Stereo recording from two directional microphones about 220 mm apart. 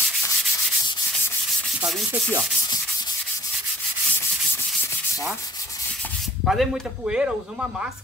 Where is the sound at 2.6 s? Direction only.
20° left (ahead or behind).